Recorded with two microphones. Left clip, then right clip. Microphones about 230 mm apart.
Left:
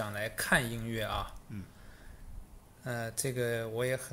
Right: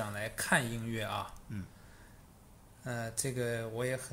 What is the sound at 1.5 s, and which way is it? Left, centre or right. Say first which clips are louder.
Speech: right 1 dB; right.